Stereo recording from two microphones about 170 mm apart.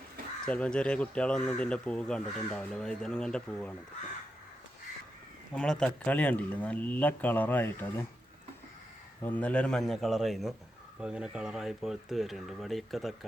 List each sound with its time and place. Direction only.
0.4 s speech: 5° left (ahead or behind)
5.5 s speech: 5° left (ahead or behind)
9.2 s speech: 10° left (ahead or behind)